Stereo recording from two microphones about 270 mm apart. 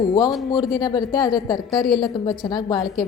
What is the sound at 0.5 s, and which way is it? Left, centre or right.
A woman's voice, centre.